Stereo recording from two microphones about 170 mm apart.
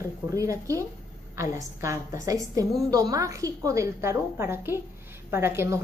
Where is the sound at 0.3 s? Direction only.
20° right (ahead or behind).